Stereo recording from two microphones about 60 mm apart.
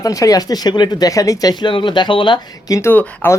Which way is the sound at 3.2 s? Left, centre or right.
Left.